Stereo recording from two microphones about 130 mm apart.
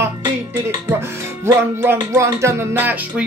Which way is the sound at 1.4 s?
20° right (ahead or behind).